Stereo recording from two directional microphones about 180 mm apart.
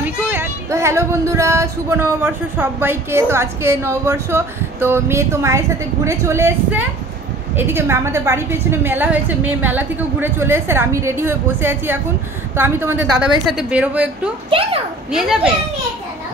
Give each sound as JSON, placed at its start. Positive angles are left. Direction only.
{"t": 0.0, "sound": "speech", "side_deg": -10}
{"t": 14.5, "sound": "a child's voice", "side_deg": -30}
{"t": 15.0, "sound": "a child's voice", "side_deg": -5}